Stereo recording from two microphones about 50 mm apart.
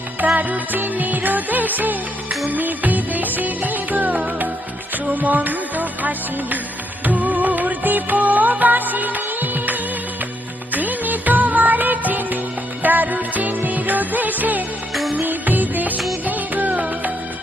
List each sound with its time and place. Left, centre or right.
0.3 s music: right